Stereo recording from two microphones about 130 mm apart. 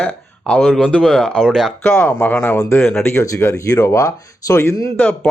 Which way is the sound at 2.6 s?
20° left (ahead or behind).